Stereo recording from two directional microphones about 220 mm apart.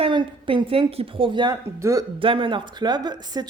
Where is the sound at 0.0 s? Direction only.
20° right (ahead or behind).